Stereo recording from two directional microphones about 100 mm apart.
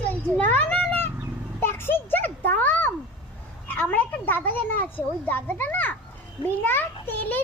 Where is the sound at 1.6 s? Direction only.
20° left (ahead or behind).